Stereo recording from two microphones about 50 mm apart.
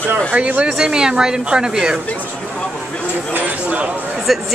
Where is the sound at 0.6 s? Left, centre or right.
Centre.